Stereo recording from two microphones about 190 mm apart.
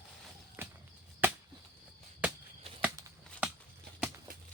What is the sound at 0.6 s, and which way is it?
Chop, 10° right (ahead or behind).